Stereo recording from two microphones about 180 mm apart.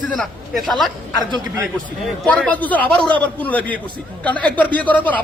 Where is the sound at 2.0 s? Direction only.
5° left (ahead or behind).